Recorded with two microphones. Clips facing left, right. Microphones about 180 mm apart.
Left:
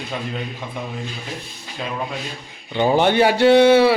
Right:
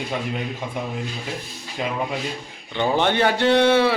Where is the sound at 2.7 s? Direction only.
10° left (ahead or behind).